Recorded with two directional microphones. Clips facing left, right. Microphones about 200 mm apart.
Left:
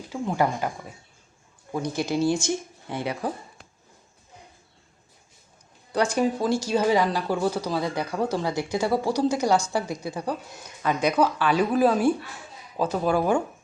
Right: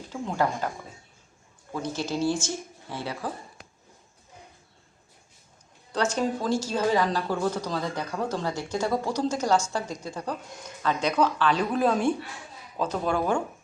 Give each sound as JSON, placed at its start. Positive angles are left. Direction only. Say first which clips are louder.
{"t": 0.1, "sound": "speech", "louder": "left 3 dB", "side_deg": 10}
{"t": 1.7, "sound": "speech", "louder": "left 4 dB", "side_deg": 15}
{"t": 5.9, "sound": "speech", "louder": "left 3 dB", "side_deg": 10}